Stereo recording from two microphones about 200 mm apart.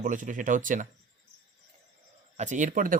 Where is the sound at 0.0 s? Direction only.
40° right (ahead or behind).